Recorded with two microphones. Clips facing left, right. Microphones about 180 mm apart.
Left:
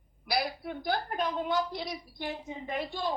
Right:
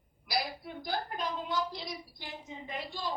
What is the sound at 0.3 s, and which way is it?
A woman's voice, 60° left (ahead or behind).